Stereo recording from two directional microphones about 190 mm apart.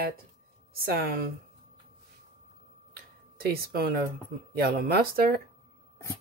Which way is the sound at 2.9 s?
55° right (ahead or behind).